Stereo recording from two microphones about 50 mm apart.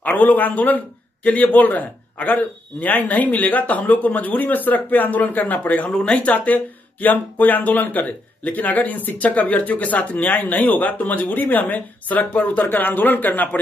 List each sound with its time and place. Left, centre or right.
0.0 s speech: left
5.9 s speech: centre; by 13.6 s left